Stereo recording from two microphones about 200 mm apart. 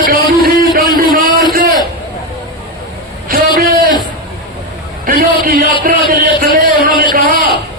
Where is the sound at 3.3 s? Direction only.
45° right (ahead or behind).